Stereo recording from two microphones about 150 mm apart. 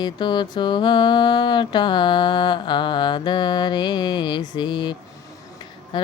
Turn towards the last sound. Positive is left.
turn(degrees=30)  # may be behind; listen again after turning